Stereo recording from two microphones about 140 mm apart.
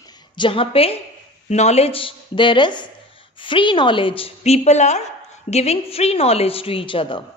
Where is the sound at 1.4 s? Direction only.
50° left (ahead or behind).